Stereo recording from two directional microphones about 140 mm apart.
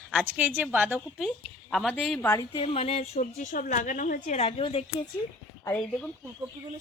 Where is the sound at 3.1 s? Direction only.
65° left (ahead or behind).